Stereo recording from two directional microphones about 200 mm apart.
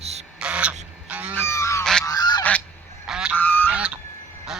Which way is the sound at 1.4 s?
15° left (ahead or behind).